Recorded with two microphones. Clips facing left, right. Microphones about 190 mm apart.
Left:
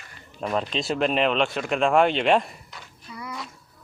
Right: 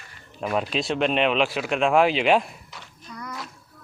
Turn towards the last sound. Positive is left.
turn(degrees=5)  # may be behind; listen again after turning